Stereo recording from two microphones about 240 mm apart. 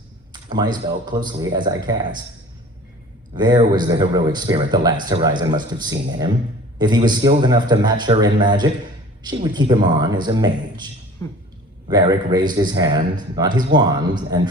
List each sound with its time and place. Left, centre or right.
0.5 s a man's voice: centre
3.3 s a man's voice: centre
11.2 s speech: centre
11.9 s a man's voice: centre